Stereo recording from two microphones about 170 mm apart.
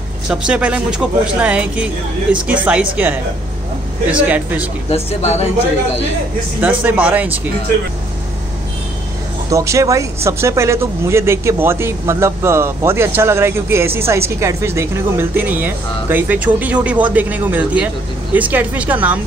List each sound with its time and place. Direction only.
0.3 s speech: 5° right (ahead or behind)
4.9 s speech: 40° left (ahead or behind)
6.8 s speech: 10° right (ahead or behind)
9.5 s speech: 20° right (ahead or behind)